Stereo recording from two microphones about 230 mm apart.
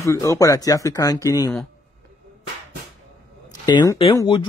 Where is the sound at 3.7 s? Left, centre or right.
Centre.